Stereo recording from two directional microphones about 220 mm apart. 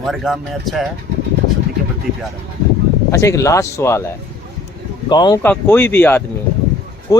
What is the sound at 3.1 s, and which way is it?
Speech, 15° left (ahead or behind).